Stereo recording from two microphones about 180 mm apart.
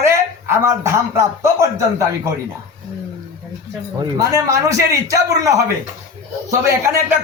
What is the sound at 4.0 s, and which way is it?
A man's voice, 15° right (ahead or behind).